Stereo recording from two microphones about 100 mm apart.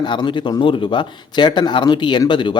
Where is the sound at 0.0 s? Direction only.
50° left (ahead or behind).